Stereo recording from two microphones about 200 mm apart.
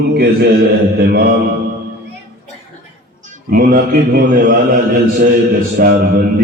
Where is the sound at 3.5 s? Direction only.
45° right (ahead or behind).